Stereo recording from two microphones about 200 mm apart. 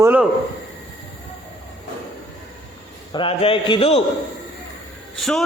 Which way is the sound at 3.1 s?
25° left (ahead or behind).